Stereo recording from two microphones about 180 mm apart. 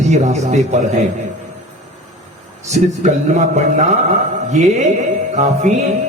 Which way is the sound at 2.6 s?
40° right (ahead or behind).